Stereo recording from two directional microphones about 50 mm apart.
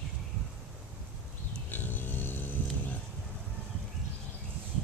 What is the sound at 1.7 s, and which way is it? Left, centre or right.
Vehicle, left.